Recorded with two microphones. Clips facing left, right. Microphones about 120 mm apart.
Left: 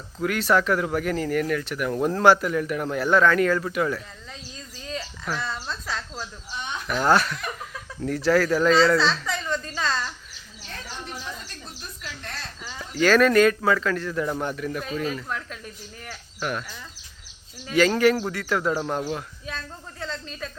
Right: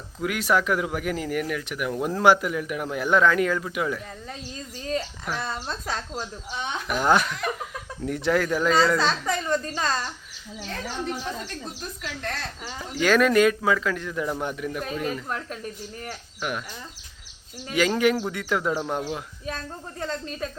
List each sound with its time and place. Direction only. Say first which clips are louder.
0.2 s speech: left 2 dB; 10° right (ahead or behind)
4.9 s a sound: even; 15° right (ahead or behind)
5.6 s a child's voice: right 1 dB; 45° right (ahead or behind)
6.8 s speech: left 1 dB; 15° right (ahead or behind)
9.0 s a child's voice: even; 45° right (ahead or behind)
11.8 s a sound: right 5 dB; 75° right (ahead or behind)
12.8 s speech: left 2 dB; 15° right (ahead or behind)
15.3 s speech: right 1 dB; 40° right (ahead or behind)
16.4 s speech: left 1 dB; 10° right (ahead or behind)
17.7 s speech: left 2 dB; 15° right (ahead or behind)
19.5 s a child's voice: right 3 dB; 45° right (ahead or behind)